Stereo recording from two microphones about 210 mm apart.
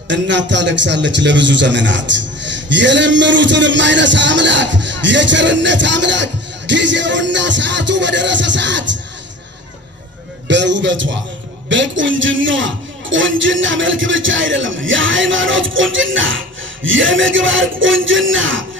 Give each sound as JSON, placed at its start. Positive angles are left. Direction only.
{"t": 0.1, "sound": "a man's voice", "side_deg": -60}
{"t": 10.5, "sound": "a man's voice", "side_deg": -60}